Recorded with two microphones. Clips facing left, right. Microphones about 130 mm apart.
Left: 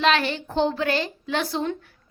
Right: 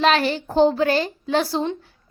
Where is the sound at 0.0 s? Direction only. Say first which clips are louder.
Right 3 dB; 35° right (ahead or behind).